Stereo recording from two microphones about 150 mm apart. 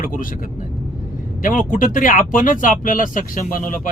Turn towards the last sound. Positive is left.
turn(degrees=65)  # may be behind; listen again after turning